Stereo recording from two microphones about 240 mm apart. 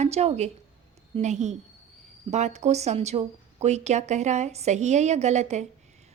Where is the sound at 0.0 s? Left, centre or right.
Right.